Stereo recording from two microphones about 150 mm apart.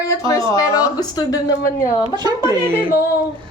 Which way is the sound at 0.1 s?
25° left (ahead or behind).